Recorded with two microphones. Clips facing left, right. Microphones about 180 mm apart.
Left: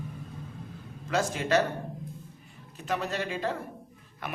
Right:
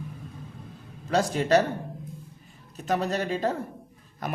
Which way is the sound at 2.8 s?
40° right (ahead or behind).